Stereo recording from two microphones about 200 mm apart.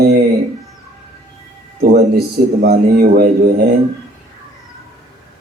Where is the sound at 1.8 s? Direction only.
55° right (ahead or behind).